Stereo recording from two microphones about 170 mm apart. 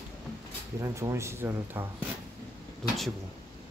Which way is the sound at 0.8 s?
15° right (ahead or behind).